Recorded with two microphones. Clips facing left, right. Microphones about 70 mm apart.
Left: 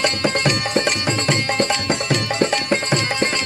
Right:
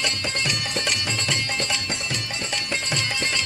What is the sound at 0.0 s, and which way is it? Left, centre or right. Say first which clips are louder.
Music: left 8 dB; left.